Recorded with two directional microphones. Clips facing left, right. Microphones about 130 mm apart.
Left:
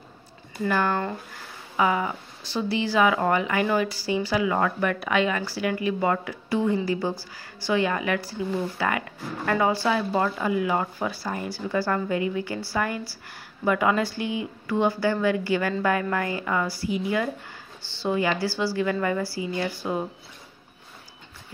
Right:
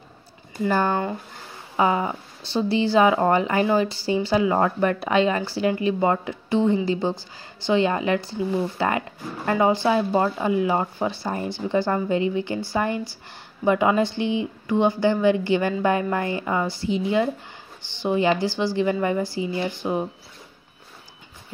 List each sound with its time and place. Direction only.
0.7 s a woman's voice: 30° right (ahead or behind)